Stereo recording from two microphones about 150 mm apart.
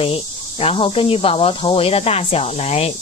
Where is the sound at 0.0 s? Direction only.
40° left (ahead or behind).